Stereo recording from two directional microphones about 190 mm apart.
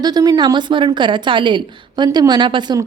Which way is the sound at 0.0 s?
20° right (ahead or behind).